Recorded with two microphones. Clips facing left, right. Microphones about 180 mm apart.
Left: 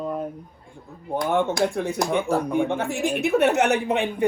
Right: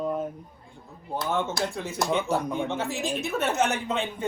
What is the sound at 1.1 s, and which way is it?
Speech, 15° left (ahead or behind).